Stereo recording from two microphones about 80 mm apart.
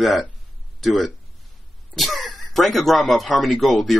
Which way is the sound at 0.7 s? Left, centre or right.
Centre.